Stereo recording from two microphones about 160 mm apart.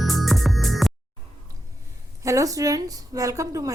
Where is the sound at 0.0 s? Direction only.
Centre (ahead or behind).